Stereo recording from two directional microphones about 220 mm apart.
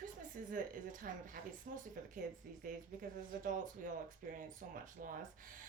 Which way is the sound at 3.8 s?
40° right (ahead or behind).